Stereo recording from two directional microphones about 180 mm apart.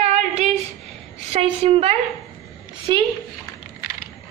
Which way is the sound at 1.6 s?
35° right (ahead or behind).